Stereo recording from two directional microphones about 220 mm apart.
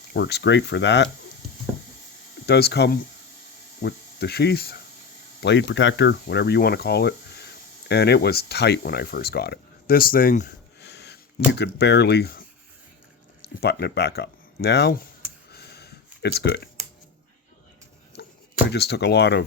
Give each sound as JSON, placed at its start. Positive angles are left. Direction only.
{"t": 0.1, "sound": "speech", "side_deg": 50}
{"t": 2.5, "sound": "speech", "side_deg": 45}
{"t": 15.5, "sound": "a sound", "side_deg": 45}
{"t": 18.7, "sound": "speech", "side_deg": 50}